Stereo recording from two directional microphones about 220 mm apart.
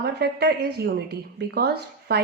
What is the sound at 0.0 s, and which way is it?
A woman's voice, 50° right (ahead or behind).